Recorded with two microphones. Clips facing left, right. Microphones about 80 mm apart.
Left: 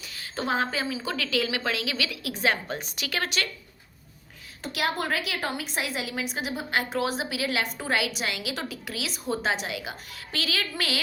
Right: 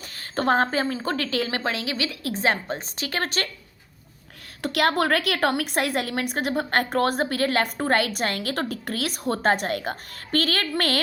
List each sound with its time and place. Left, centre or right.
0.1 s a woman's voice: right
4.6 s a woman's voice: right